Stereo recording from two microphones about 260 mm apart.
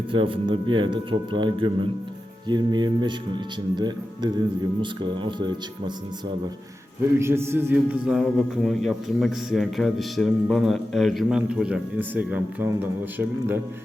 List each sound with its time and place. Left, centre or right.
0.1 s a man's voice: centre
7.2 s a man's voice: centre